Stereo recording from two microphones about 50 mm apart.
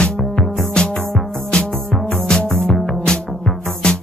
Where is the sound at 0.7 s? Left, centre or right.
Centre.